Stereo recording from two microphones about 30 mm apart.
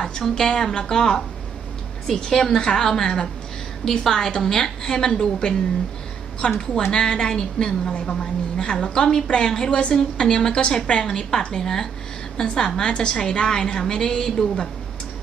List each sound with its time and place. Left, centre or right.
0.2 s a woman's voice: centre
3.8 s a woman's voice: centre
9.6 s a woman's voice: left
9.9 s a woman's voice: left